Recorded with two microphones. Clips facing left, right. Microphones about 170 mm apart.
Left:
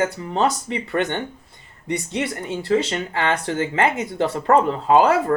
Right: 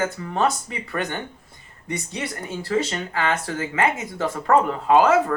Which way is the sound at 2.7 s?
25° left (ahead or behind).